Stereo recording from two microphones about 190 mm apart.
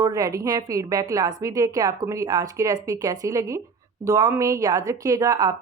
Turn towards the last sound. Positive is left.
turn(degrees=-15)  # may be behind; listen again after turning